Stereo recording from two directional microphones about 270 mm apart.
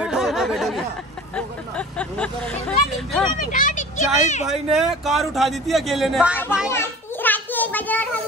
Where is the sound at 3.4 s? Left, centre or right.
Left.